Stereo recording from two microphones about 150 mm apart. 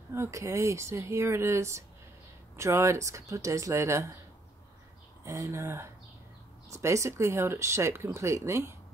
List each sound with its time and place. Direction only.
0.1 s speech: 20° right (ahead or behind)
5.2 s speech: 20° right (ahead or behind)